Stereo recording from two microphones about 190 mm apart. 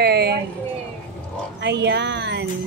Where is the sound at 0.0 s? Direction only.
60° right (ahead or behind).